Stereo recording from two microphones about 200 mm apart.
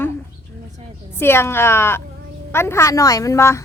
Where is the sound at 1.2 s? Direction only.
10° left (ahead or behind).